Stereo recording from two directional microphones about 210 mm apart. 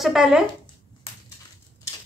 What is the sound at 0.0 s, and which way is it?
Speech, centre (ahead or behind).